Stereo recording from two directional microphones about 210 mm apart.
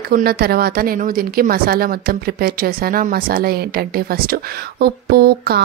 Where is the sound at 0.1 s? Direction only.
45° right (ahead or behind).